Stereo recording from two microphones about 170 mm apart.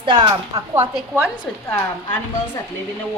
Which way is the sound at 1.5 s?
Centre (ahead or behind).